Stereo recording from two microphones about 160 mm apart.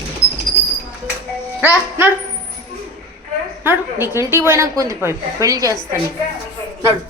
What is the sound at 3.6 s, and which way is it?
A woman's voice, 15° right (ahead or behind).